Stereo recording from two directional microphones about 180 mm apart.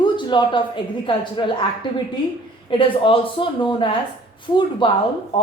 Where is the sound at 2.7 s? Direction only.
30° left (ahead or behind).